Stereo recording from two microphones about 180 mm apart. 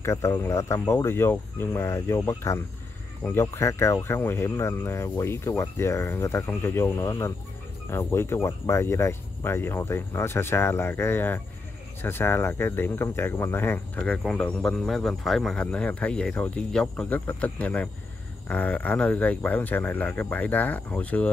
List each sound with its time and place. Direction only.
0.0 s speech: 15° left (ahead or behind)